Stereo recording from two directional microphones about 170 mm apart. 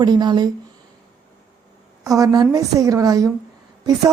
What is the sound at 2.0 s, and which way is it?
Speech, 20° right (ahead or behind).